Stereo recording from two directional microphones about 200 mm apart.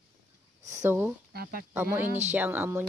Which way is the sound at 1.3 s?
50° right (ahead or behind).